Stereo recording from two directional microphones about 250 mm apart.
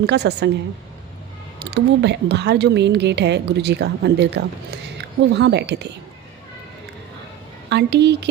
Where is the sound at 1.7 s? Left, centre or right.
Right.